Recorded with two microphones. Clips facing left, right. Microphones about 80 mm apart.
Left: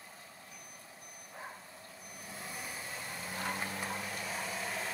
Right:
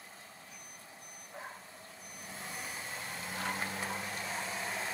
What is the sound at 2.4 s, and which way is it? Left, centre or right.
Vehicle, right.